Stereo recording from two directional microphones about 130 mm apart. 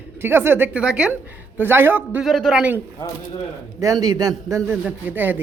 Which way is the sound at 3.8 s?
30° right (ahead or behind).